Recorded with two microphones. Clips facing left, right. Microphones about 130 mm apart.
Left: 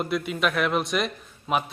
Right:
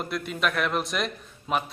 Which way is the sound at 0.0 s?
Centre (ahead or behind).